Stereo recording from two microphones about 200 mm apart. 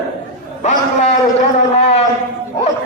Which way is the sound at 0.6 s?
30° left (ahead or behind).